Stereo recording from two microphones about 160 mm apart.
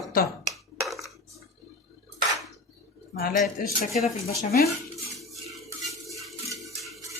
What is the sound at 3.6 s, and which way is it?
Speech, 60° left (ahead or behind).